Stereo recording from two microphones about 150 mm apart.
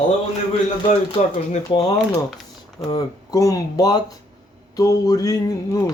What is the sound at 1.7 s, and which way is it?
Speech, 35° left (ahead or behind).